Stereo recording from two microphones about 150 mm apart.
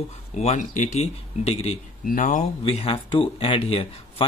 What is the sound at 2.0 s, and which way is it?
Speech, 65° left (ahead or behind).